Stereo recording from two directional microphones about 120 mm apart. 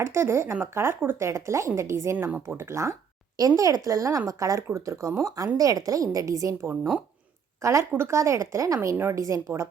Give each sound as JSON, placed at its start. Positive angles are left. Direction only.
{"t": 0.0, "sound": "speech", "side_deg": -20}